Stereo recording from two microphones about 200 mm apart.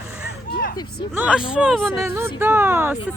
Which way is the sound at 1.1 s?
5° right (ahead or behind).